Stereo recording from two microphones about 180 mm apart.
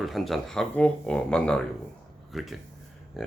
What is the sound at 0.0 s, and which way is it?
Speech, centre (ahead or behind).